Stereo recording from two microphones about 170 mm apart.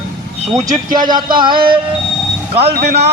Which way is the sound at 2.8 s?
40° right (ahead or behind).